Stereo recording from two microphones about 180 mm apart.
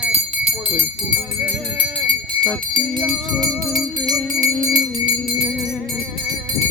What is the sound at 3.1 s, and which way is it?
Music, 20° right (ahead or behind).